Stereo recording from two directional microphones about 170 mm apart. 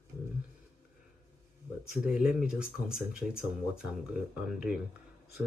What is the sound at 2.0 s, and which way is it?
Speech, 5° right (ahead or behind).